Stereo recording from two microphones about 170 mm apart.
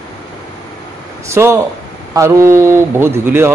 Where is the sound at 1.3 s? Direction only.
15° right (ahead or behind).